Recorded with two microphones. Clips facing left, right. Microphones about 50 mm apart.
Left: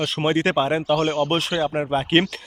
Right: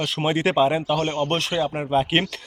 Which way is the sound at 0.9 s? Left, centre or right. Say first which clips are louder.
Left 2 dB; left.